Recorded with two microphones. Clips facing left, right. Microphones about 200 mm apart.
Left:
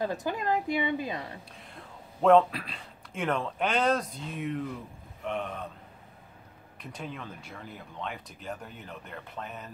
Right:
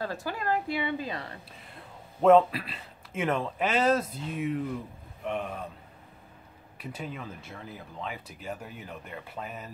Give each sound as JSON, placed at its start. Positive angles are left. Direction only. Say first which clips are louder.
{"t": 0.0, "sound": "a woman's voice", "louder": "left 2 dB", "side_deg": 15}
{"t": 1.6, "sound": "a man's voice", "louder": "even", "side_deg": -5}
{"t": 6.8, "sound": "speech", "louder": "right 2 dB", "side_deg": -5}